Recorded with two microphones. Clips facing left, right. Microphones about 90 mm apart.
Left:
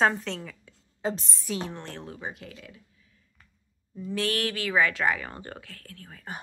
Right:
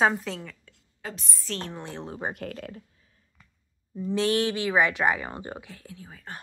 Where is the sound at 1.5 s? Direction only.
10° left (ahead or behind).